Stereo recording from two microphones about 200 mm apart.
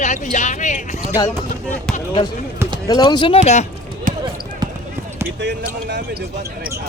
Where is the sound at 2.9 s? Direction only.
20° left (ahead or behind).